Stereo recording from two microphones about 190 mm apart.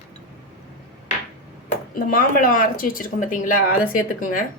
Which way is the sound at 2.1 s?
45° left (ahead or behind).